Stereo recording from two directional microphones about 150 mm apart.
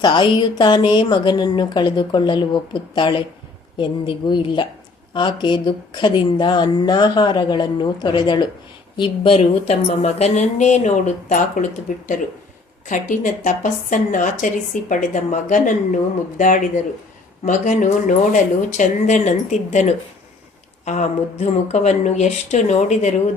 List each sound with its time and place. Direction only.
0.0 s a woman's voice: 30° left (ahead or behind); by 23.1 s 50° left (ahead or behind)